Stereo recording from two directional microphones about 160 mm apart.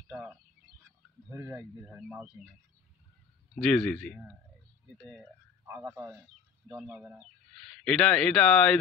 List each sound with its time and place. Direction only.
0.1 s speech: 5° right (ahead or behind)
3.5 s speech: 5° left (ahead or behind)
5.7 s speech: 10° right (ahead or behind); by 8.7 s 5° left (ahead or behind)